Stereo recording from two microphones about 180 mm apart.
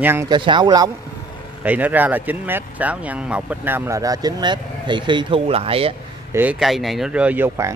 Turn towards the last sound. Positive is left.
turn(degrees=-15)  # may be behind; listen again after turning